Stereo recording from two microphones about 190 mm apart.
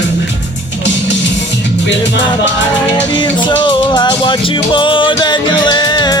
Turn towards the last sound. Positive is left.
turn(degrees=20)  # may be behind; listen again after turning